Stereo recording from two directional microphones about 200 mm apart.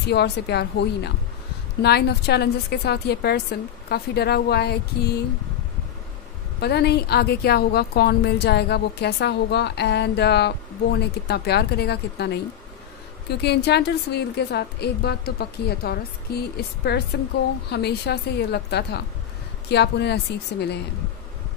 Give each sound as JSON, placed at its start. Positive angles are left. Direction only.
{"t": 0.1, "sound": "a woman's voice", "side_deg": 55}
{"t": 6.6, "sound": "a woman's voice", "side_deg": 55}